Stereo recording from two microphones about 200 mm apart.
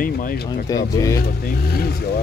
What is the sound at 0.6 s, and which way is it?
Speech, 15° left (ahead or behind).